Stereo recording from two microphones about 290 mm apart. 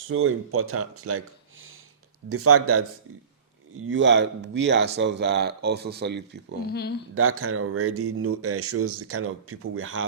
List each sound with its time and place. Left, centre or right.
0.1 s speech: right
6.7 s speech: left
7.1 s speech: right